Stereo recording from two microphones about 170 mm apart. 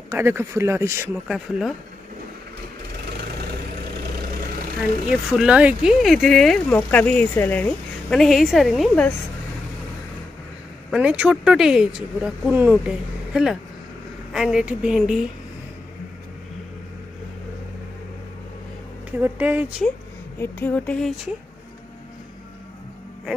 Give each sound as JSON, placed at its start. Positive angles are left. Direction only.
{"t": 0.1, "sound": "speech", "side_deg": -15}
{"t": 1.2, "sound": "speech", "side_deg": -5}
{"t": 5.3, "sound": "speech", "side_deg": -5}
{"t": 10.9, "sound": "speech", "side_deg": -5}
{"t": 19.0, "sound": "speech", "side_deg": -10}
{"t": 20.3, "sound": "a woman's voice", "side_deg": 10}